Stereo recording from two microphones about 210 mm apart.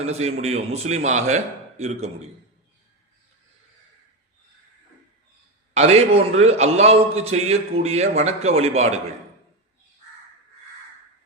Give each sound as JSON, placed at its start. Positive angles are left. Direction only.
{"t": 0.0, "sound": "a man's voice", "side_deg": -30}
{"t": 5.7, "sound": "a man's voice", "side_deg": -30}